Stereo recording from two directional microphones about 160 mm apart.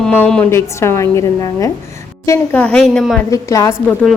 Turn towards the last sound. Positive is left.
turn(degrees=0)  # may be behind; listen again after turning